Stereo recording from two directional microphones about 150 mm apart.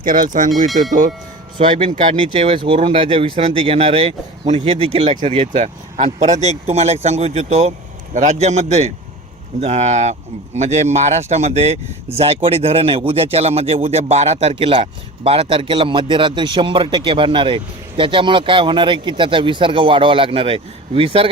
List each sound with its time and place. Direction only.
0.0 s speech: 65° right (ahead or behind)
1.5 s a man's voice: 35° right (ahead or behind)
2.0 s a man's voice: 45° right (ahead or behind)